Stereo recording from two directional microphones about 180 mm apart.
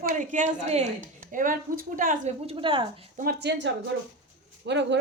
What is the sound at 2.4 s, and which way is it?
Speech, 30° right (ahead or behind).